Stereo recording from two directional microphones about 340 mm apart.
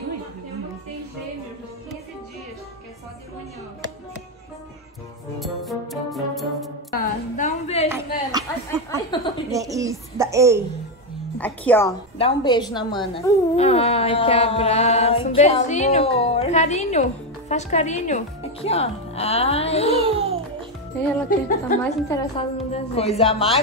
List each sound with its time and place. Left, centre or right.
5.4 s music: centre
6.9 s a sound: left
8.9 s a sound: centre
9.5 s speech: centre
11.3 s a woman's voice: centre
20.2 s music: centre
21.3 s a woman's voice: left
21.8 s a woman's voice: centre